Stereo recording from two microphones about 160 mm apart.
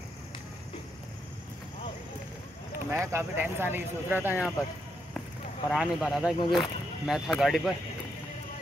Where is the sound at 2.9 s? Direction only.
15° right (ahead or behind).